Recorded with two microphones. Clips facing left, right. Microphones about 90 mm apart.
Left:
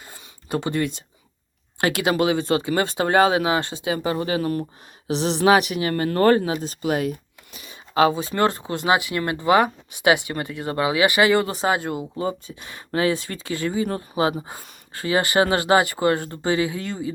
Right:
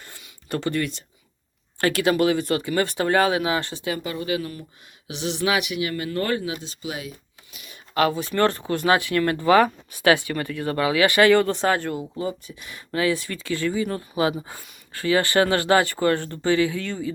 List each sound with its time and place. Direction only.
0.4 s speech: 20° left (ahead or behind)
4.0 s speech: 35° left (ahead or behind); by 7.2 s 55° left (ahead or behind)
7.5 s a sound: 30° left (ahead or behind)
8.4 s speech: 20° left (ahead or behind)
11.9 s speech: 25° left (ahead or behind)
13.7 s speech: 35° left (ahead or behind)